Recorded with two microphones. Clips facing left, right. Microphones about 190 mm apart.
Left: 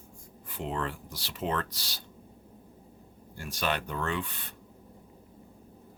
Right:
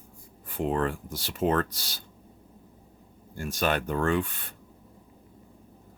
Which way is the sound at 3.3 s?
45° right (ahead or behind).